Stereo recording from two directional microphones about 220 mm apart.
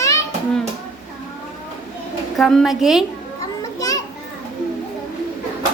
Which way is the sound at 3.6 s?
15° left (ahead or behind).